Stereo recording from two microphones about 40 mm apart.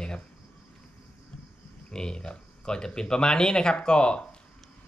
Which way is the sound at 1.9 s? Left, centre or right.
Left.